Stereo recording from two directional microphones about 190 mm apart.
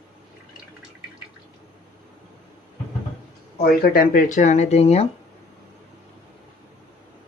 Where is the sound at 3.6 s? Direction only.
50° left (ahead or behind); by 5.1 s 35° left (ahead or behind).